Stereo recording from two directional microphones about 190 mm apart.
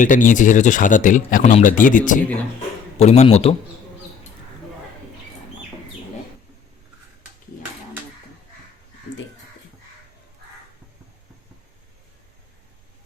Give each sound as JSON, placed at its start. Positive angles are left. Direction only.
{"t": 0.0, "sound": "a man's voice", "side_deg": 45}